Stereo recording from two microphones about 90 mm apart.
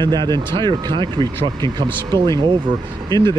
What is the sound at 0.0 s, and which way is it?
Speech, 55° right (ahead or behind).